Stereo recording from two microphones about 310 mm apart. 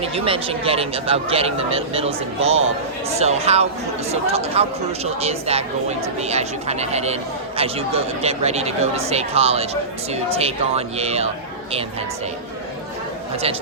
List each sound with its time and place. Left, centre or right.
0.0 s speech: centre
13.3 s speech: centre